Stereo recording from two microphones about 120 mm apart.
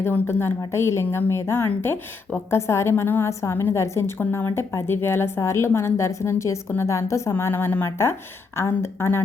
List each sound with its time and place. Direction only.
0.0 s a woman's voice: 20° left (ahead or behind)